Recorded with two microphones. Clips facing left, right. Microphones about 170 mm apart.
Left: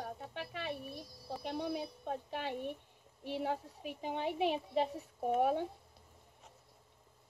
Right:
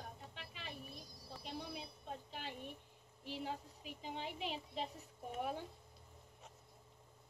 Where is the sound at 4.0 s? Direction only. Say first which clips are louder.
Left 10 dB; 60° left (ahead or behind).